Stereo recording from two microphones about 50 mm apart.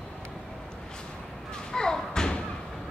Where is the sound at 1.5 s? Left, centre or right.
Centre.